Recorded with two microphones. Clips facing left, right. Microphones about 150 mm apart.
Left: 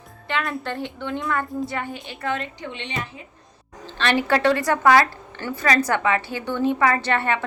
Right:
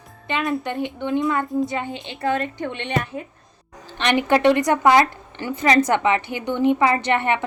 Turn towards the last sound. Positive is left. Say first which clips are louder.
# right 2 dB
turn(degrees=-20)  # may be behind; listen again after turning